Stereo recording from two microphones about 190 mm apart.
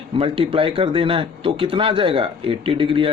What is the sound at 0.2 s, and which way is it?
Speech, 30° right (ahead or behind).